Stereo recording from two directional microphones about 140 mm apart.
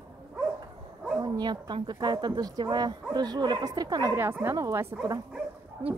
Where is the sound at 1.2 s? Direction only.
30° right (ahead or behind).